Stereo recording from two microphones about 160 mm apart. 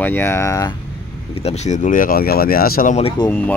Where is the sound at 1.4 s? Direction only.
45° left (ahead or behind); by 3.0 s 65° left (ahead or behind).